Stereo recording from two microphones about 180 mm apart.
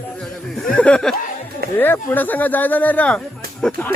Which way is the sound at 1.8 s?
10° left (ahead or behind).